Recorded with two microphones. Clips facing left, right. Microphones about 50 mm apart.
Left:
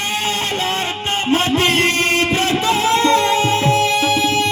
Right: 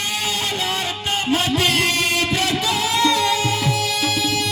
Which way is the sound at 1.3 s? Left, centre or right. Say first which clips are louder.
Left 4 dB; left.